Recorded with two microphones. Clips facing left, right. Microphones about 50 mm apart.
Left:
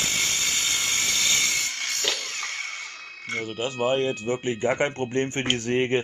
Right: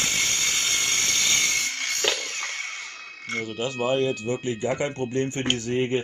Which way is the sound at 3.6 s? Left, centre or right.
Left.